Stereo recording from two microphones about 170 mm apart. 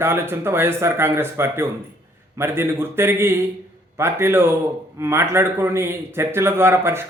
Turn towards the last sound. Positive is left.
turn(degrees=-15)  # may be behind; listen again after turning